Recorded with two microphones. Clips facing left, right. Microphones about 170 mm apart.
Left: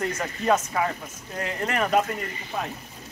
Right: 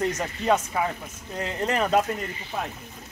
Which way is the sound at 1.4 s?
25° right (ahead or behind).